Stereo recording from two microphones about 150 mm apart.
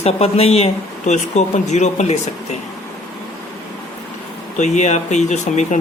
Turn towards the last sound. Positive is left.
turn(degrees=50)  # may be behind; listen again after turning